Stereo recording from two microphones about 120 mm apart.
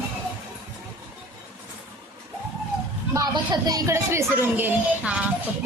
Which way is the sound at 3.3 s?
35° right (ahead or behind).